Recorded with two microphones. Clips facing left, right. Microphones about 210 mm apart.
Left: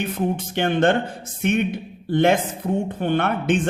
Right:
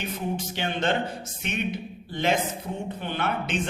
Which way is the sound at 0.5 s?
55° left (ahead or behind).